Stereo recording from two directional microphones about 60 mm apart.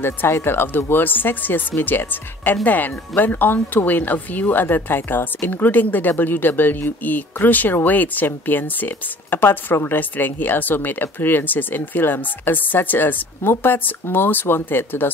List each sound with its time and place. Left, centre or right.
0.4 s speech: left